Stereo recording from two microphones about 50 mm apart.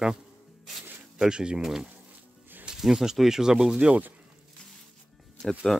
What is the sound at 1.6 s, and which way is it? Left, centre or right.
Speech, centre.